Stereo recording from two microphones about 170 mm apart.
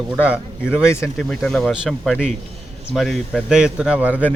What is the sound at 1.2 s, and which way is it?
A man's voice, 5° left (ahead or behind).